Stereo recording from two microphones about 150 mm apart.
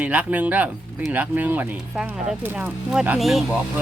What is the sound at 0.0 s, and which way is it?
Speech, 10° right (ahead or behind).